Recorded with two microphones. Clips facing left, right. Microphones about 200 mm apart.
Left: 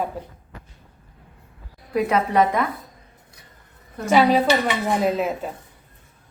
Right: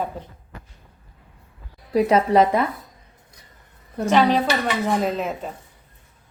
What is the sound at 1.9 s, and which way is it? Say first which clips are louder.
Speech: right 3 dB; 30° right (ahead or behind).